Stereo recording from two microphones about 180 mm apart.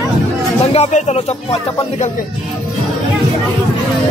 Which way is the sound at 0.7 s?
40° left (ahead or behind).